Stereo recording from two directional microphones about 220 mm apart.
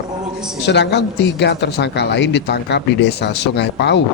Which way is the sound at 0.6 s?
50° left (ahead or behind).